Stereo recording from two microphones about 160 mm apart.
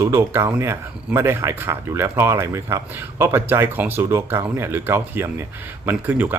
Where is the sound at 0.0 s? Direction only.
15° right (ahead or behind).